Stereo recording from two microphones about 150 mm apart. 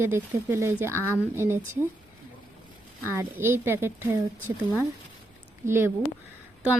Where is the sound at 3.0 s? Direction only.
15° right (ahead or behind).